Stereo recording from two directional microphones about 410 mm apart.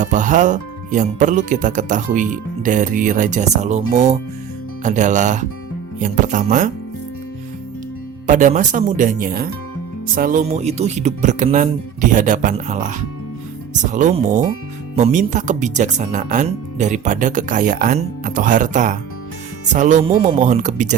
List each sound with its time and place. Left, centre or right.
0.0 s speech: centre
8.3 s speech: centre